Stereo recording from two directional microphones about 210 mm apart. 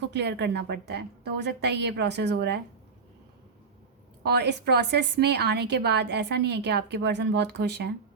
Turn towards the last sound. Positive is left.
turn(degrees=-55)  # may be behind; listen again after turning